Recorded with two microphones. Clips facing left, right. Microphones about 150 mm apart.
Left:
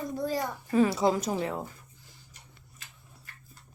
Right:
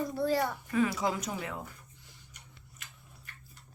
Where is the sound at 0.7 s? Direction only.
30° left (ahead or behind).